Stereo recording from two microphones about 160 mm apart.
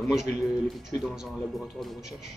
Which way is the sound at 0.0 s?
Centre (ahead or behind).